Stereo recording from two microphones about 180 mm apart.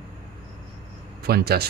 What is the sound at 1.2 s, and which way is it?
Speech, 60° right (ahead or behind).